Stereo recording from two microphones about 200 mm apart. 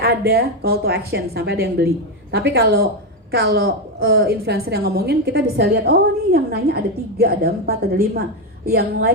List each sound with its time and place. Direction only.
0.0 s a woman's voice: 50° right (ahead or behind)